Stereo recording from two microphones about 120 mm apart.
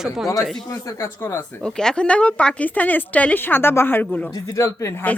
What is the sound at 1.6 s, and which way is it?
A woman's voice, 5° left (ahead or behind).